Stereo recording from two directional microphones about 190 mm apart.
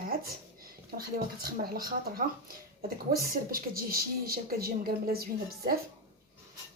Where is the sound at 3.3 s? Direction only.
50° right (ahead or behind).